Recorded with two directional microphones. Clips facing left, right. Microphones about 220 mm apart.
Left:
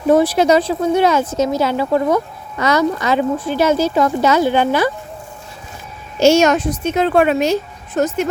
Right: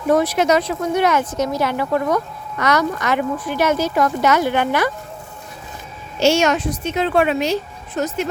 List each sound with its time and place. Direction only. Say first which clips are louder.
0.1 s speech: left 4 dB; 30° left (ahead or behind)
6.1 s a woman's voice: left 4 dB; 45° left (ahead or behind)